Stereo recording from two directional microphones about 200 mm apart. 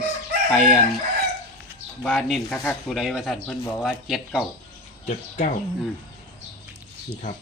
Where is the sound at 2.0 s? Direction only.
Centre (ahead or behind).